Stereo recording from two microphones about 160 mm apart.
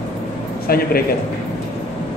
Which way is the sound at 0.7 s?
70° left (ahead or behind).